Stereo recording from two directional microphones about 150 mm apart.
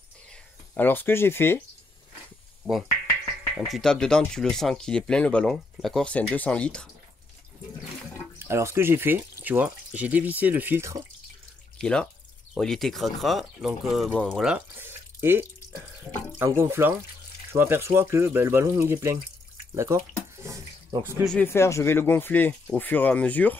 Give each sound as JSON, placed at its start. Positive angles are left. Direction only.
{"t": 0.3, "sound": "speech", "side_deg": 10}
{"t": 3.5, "sound": "speech", "side_deg": 0}
{"t": 8.4, "sound": "speech", "side_deg": -15}
{"t": 11.8, "sound": "speech", "side_deg": 5}
{"t": 14.8, "sound": "drip", "side_deg": -15}
{"t": 16.3, "sound": "speech", "side_deg": -15}
{"t": 20.4, "sound": "bathtub", "side_deg": -20}
{"t": 21.0, "sound": "speech", "side_deg": -15}
{"t": 21.3, "sound": "speech", "side_deg": 15}